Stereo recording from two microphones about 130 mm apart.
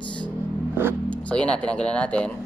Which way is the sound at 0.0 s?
40° left (ahead or behind).